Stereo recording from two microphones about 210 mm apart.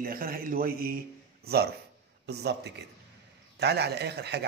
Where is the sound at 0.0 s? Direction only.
45° right (ahead or behind).